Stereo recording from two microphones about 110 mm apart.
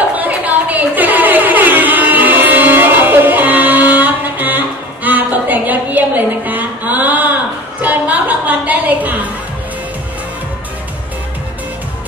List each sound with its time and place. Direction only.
0.2 s music: 15° right (ahead or behind)